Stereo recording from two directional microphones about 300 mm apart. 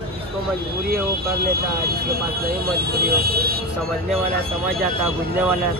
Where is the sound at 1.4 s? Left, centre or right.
Right.